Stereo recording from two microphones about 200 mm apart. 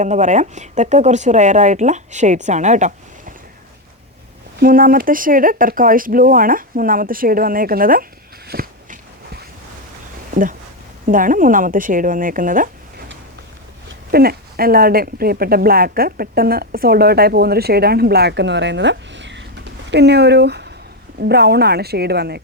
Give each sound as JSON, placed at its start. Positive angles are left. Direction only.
{"t": 0.0, "sound": "speech", "side_deg": -35}
{"t": 4.6, "sound": "speech", "side_deg": -45}
{"t": 8.4, "sound": "a sound", "side_deg": -50}
{"t": 11.0, "sound": "speech", "side_deg": -40}
{"t": 14.1, "sound": "speech", "side_deg": -50}